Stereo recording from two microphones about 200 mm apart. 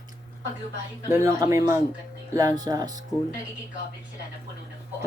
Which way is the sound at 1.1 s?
15° right (ahead or behind).